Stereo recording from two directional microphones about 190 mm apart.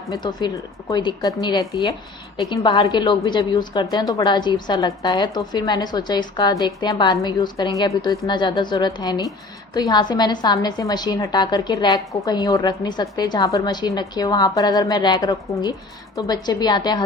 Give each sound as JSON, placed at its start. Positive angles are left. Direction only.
{"t": 0.1, "sound": "a woman's voice", "side_deg": 20}